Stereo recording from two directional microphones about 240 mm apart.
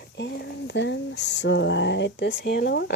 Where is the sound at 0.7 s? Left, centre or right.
Left.